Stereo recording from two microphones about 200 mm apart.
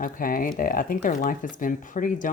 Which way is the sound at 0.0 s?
45° left (ahead or behind).